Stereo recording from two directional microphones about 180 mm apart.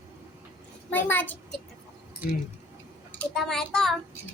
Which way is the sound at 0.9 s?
10° left (ahead or behind).